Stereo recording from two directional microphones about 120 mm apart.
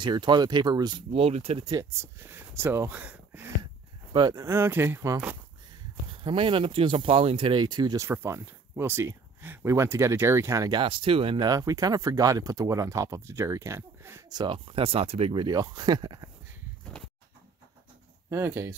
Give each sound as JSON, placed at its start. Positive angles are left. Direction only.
{"t": 0.0, "sound": "speech", "side_deg": -40}
{"t": 1.1, "sound": "speech", "side_deg": -55}
{"t": 1.6, "sound": "speech", "side_deg": -30}
{"t": 4.1, "sound": "speech", "side_deg": -30}
{"t": 6.0, "sound": "speech", "side_deg": -45}
{"t": 8.0, "sound": "speech", "side_deg": -20}
{"t": 10.8, "sound": "speech", "side_deg": -50}
{"t": 11.4, "sound": "speech", "side_deg": -30}
{"t": 14.3, "sound": "speech", "side_deg": -40}
{"t": 18.3, "sound": "speech", "side_deg": -20}